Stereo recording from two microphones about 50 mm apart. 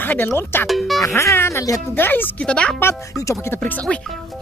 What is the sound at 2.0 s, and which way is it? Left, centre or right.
Speech, left.